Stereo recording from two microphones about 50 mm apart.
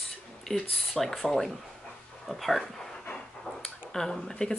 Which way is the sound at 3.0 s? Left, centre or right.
Left.